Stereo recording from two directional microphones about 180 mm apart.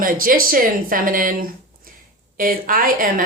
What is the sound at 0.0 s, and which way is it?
Speech, 50° right (ahead or behind).